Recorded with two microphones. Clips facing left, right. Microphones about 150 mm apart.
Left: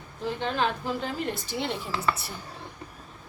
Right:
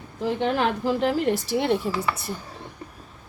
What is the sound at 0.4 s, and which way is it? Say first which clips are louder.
A woman's voice: right 5 dB; 70° right (ahead or behind).